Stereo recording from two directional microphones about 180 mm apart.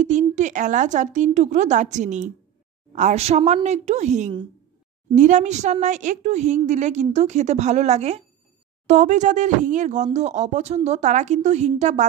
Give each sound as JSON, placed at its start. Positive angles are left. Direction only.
{"t": 0.0, "sound": "a woman's voice", "side_deg": -40}